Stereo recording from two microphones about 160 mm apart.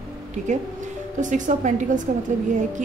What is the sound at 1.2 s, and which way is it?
Speech, 50° right (ahead or behind).